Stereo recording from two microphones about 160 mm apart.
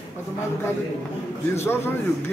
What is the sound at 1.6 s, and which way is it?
Speech, 15° left (ahead or behind).